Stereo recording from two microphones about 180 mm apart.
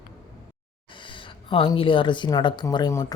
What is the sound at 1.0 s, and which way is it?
Speech, 30° left (ahead or behind).